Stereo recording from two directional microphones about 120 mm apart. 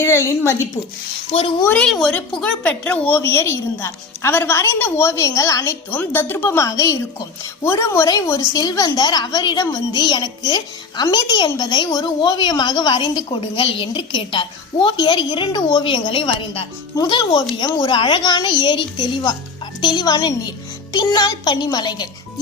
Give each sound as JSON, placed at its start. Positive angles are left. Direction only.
{"t": 0.0, "sound": "a woman's voice", "side_deg": 20}
{"t": 1.3, "sound": "speech", "side_deg": 50}
{"t": 1.6, "sound": "a woman's voice", "side_deg": 15}